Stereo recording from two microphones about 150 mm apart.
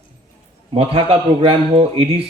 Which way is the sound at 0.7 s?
35° right (ahead or behind).